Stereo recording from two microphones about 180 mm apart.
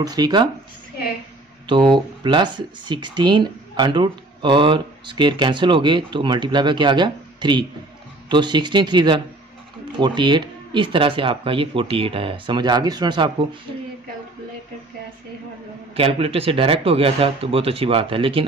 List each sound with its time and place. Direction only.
0.0 s speech: 20° right (ahead or behind)
1.7 s speech: 25° right (ahead or behind)
16.0 s speech: 30° right (ahead or behind)